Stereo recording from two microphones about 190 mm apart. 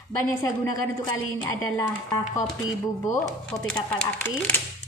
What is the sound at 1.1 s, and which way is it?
Speech, 10° left (ahead or behind).